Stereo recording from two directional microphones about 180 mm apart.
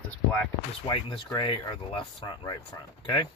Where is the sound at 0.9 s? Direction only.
25° left (ahead or behind).